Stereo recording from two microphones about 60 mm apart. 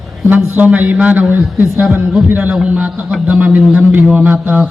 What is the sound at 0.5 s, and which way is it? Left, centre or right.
Speech, right.